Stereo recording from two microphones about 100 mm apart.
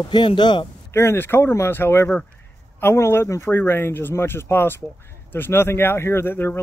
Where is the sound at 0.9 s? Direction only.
25° left (ahead or behind).